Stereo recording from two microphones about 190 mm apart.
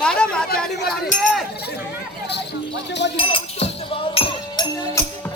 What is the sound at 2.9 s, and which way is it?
Speech, 65° left (ahead or behind).